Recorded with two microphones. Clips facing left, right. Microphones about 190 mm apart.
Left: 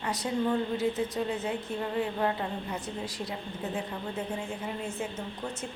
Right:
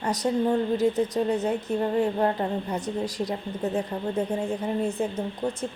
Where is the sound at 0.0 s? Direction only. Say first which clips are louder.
Right 5 dB; 40° right (ahead or behind).